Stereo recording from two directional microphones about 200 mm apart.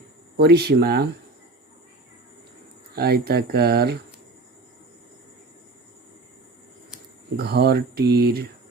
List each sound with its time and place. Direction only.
0.3 s speech: 55° right (ahead or behind)
2.9 s speech: 50° right (ahead or behind)
7.3 s speech: 55° right (ahead or behind)